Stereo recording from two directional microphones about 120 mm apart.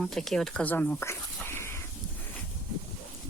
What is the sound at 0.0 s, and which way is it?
Speech, 5° left (ahead or behind).